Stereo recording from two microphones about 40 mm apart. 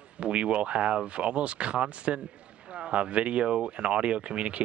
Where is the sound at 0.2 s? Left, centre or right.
Right.